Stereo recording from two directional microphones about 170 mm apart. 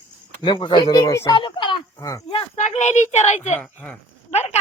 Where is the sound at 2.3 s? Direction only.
40° left (ahead or behind).